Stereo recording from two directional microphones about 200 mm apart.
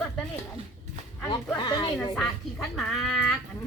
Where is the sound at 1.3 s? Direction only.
25° left (ahead or behind).